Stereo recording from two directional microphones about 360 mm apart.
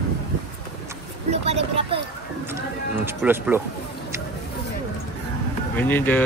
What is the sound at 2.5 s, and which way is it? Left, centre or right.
Speech, centre.